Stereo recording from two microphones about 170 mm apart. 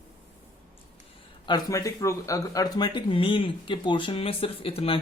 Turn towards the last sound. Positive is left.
turn(degrees=35)  # may be behind; listen again after turning